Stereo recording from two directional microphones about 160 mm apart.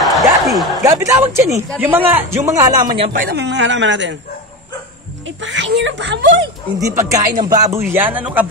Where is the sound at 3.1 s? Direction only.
80° right.